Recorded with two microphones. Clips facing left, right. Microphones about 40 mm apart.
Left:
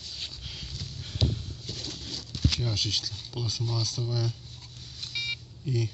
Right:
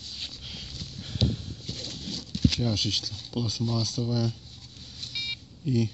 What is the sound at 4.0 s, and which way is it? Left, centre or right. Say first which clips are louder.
Speech: right 4 dB; centre.